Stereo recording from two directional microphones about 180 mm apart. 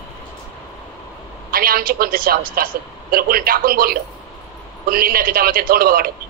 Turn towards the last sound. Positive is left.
turn(degrees=-55)  # may be behind; listen again after turning